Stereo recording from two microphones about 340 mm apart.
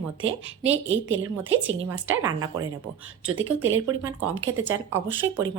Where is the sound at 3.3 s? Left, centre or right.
Right.